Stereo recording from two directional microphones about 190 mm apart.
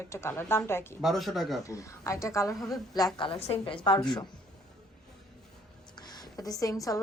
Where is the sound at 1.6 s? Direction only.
15° left (ahead or behind).